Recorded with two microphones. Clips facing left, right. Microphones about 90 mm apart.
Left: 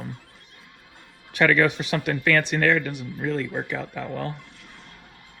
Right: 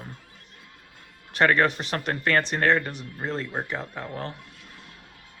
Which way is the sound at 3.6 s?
65° left (ahead or behind).